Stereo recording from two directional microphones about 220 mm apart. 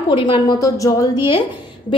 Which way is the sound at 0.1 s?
20° left (ahead or behind).